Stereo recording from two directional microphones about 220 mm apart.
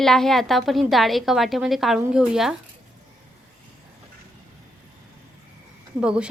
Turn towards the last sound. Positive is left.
turn(degrees=-5)  # may be behind; listen again after turning